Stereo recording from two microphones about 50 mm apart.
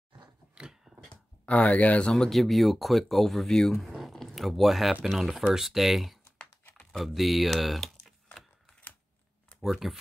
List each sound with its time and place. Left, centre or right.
0.6 s a sound: centre
1.4 s speech: left
2.0 s speech: centre
3.7 s a sound: centre
5.0 s speech: centre
9.6 s speech: centre